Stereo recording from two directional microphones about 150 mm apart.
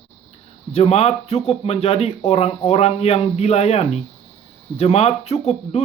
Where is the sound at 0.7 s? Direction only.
45° left (ahead or behind).